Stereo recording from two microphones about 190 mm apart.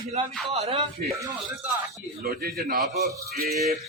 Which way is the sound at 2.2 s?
50° right (ahead or behind).